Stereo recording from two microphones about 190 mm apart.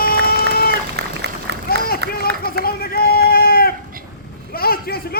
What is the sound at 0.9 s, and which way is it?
Run, 65° right (ahead or behind).